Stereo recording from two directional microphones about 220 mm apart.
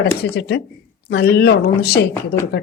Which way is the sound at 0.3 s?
50° left (ahead or behind).